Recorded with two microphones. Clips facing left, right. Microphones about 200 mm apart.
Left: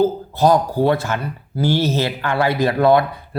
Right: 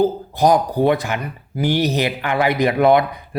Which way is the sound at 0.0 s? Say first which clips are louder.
Even; 15° right (ahead or behind).